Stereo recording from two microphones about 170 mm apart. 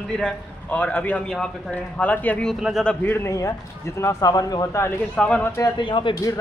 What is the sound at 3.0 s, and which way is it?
Speech, 15° left (ahead or behind).